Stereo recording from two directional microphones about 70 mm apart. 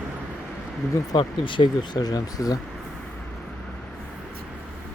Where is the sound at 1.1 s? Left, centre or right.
Left.